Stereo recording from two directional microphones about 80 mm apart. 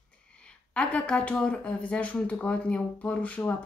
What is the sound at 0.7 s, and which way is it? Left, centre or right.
Speech, centre.